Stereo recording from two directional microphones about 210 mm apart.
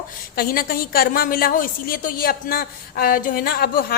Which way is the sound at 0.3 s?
45° left (ahead or behind).